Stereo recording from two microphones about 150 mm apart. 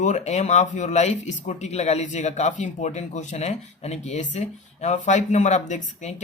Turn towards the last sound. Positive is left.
turn(degrees=50)  # may be behind; listen again after turning